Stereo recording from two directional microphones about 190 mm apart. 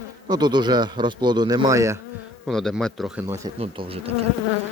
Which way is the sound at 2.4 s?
Centre (ahead or behind).